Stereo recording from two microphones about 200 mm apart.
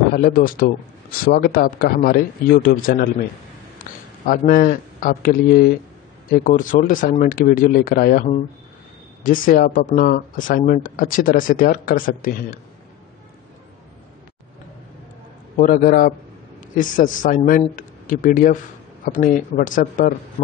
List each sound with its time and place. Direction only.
0.1 s speech: 45° left (ahead or behind)
4.3 s speech: 45° left (ahead or behind)
15.5 s a man's voice: 45° left (ahead or behind)